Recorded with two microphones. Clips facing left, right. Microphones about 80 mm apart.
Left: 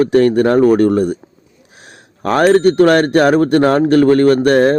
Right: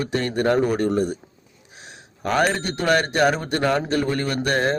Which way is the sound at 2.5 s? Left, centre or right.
Left.